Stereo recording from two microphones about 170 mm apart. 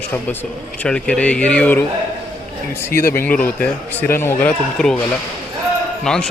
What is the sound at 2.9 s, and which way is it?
Speech, 65° left (ahead or behind).